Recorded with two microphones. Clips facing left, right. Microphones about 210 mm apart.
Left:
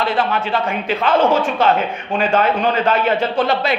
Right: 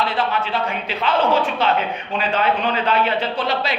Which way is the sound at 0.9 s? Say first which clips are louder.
Left 4 dB; 45° left (ahead or behind).